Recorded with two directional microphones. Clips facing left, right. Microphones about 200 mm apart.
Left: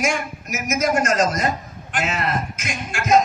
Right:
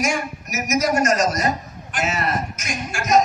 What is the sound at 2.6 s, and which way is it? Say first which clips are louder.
Speech: left 3 dB; 55° left (ahead or behind).